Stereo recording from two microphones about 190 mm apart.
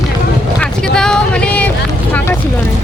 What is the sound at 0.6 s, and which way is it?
Vehicle, 5° left (ahead or behind).